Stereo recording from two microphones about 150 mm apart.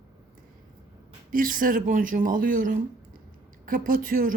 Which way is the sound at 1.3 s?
70° right (ahead or behind).